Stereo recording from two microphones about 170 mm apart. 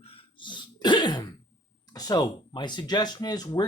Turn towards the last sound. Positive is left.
turn(degrees=25)  # may be behind; listen again after turning